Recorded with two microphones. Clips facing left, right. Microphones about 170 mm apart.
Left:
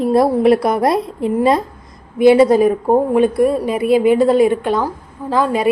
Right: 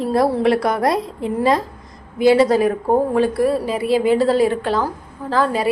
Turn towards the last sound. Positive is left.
turn(degrees=15)  # may be behind; listen again after turning